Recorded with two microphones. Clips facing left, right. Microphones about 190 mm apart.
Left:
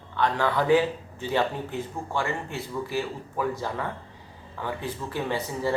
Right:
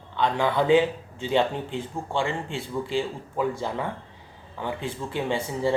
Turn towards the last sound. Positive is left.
turn(degrees=-20)  # may be behind; listen again after turning